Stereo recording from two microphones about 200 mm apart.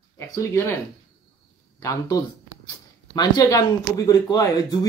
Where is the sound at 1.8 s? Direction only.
15° left (ahead or behind).